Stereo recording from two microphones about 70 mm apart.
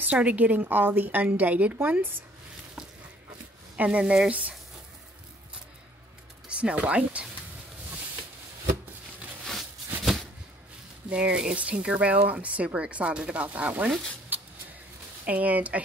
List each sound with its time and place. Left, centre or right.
0.0 s a woman's voice: right
3.7 s speech: right
6.5 s a woman's voice: centre
9.4 s a sound: centre
11.1 s speech: centre
14.3 s a sound: right
15.2 s a woman's voice: right